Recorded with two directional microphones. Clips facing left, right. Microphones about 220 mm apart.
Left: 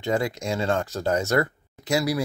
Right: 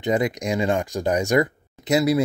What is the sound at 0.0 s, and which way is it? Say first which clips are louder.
Speech: right 3 dB; 20° right (ahead or behind).